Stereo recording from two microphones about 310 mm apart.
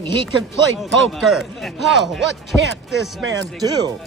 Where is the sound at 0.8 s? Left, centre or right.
Centre.